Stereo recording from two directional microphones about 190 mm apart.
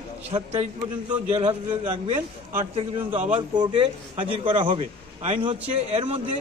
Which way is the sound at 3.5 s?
25° right (ahead or behind).